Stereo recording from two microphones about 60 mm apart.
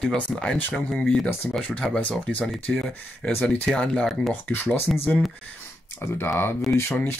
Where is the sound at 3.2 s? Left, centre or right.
Left.